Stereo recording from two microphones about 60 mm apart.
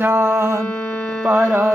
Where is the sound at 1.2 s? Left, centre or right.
Right.